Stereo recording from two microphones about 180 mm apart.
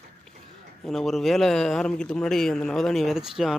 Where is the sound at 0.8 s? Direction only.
Centre (ahead or behind).